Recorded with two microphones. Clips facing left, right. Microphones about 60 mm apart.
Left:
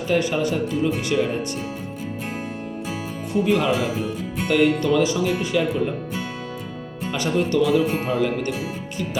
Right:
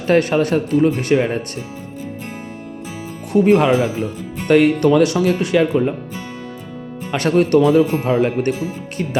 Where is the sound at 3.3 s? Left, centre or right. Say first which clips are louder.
Right 7 dB; right.